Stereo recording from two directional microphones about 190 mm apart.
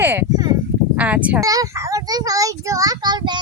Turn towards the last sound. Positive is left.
turn(degrees=-20)  # may be behind; listen again after turning